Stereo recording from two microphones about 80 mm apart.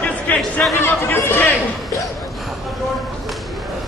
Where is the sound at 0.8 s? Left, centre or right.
Left.